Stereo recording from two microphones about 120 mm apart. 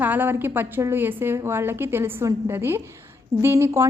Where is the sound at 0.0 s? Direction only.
15° right (ahead or behind).